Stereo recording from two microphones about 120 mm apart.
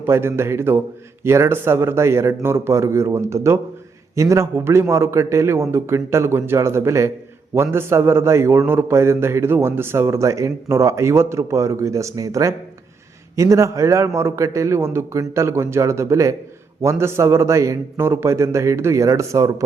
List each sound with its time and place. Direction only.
0.0 s a man's voice: 20° right (ahead or behind)